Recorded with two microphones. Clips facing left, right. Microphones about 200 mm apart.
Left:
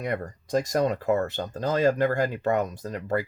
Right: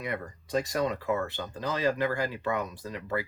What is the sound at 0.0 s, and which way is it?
Speech, 45° left (ahead or behind).